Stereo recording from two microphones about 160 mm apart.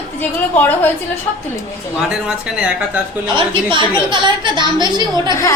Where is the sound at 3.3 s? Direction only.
30° right (ahead or behind).